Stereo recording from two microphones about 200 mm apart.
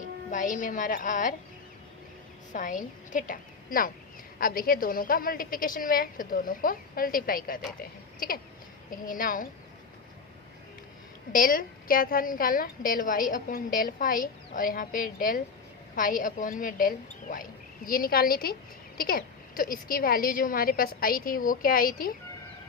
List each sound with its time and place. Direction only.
0.3 s speech: 40° left (ahead or behind)
2.5 s a woman's voice: 40° left (ahead or behind)
11.3 s a woman's voice: 45° left (ahead or behind)